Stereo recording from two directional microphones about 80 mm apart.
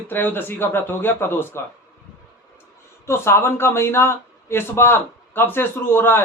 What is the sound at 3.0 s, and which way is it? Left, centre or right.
A man's voice, left.